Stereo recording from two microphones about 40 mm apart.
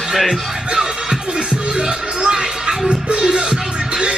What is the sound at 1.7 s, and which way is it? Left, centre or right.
Music, right.